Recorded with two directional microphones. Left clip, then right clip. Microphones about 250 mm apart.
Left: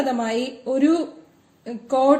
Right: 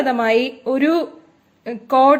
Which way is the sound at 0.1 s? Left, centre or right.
Right.